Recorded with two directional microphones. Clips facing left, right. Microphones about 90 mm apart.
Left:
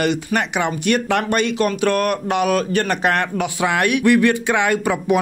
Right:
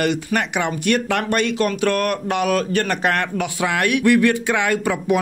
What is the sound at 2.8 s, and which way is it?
Speech, 25° left (ahead or behind).